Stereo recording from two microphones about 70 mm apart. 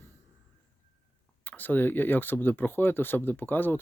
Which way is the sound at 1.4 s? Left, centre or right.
Left.